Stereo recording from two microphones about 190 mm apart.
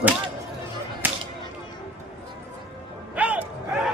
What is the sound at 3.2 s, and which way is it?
Music, 5° right (ahead or behind).